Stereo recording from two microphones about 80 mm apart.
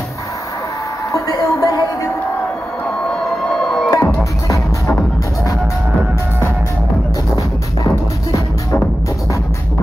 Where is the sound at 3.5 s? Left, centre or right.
Centre.